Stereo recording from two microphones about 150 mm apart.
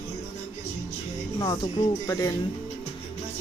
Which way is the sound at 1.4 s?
30° left (ahead or behind).